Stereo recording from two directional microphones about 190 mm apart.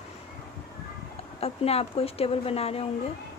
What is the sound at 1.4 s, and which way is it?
Speech, 30° left (ahead or behind).